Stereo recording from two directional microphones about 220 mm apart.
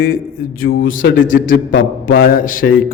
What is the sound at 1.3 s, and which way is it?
A man's voice, 40° left (ahead or behind).